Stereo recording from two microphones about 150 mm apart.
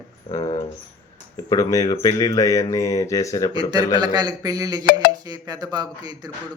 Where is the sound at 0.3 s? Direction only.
25° left (ahead or behind).